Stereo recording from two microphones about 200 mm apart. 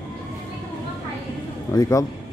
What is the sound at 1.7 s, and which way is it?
Speech, 15° left (ahead or behind).